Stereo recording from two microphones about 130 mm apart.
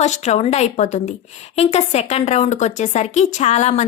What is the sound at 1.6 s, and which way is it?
A woman's voice, 55° left (ahead or behind).